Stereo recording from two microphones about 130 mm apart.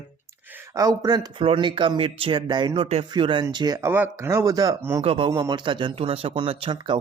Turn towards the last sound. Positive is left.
turn(degrees=-40)  # may be behind; listen again after turning